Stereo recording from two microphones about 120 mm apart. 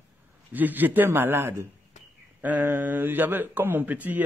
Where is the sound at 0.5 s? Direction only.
15° right (ahead or behind).